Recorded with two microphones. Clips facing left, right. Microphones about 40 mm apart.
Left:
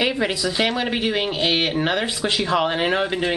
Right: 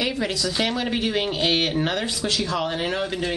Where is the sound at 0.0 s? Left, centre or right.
Left.